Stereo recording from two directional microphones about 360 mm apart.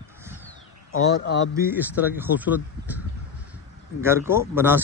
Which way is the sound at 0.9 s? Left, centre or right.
Left.